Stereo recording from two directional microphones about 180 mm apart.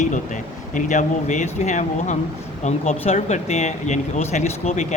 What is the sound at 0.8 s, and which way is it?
Speech, 45° left (ahead or behind).